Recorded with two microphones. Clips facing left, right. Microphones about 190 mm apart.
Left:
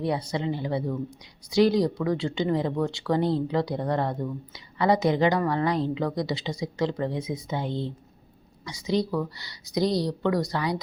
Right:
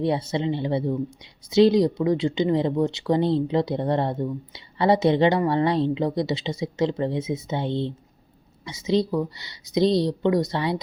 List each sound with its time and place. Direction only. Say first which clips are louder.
0.0 s speech: right 4 dB; 25° right (ahead or behind)